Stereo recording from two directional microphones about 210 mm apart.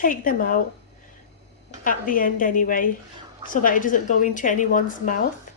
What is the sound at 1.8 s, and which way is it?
Speech, 40° left (ahead or behind).